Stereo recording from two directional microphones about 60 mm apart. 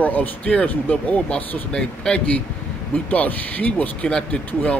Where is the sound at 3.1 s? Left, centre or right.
Left.